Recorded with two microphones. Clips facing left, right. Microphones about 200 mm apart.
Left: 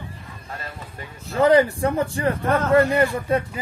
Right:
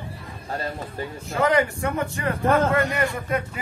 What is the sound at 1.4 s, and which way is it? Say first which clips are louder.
Speech: left 5 dB; 35° left (ahead or behind).